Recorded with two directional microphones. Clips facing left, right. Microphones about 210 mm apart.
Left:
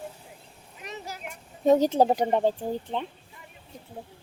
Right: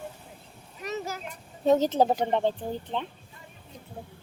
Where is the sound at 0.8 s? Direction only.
45° right (ahead or behind).